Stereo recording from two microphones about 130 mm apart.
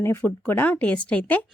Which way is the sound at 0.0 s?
20° left (ahead or behind).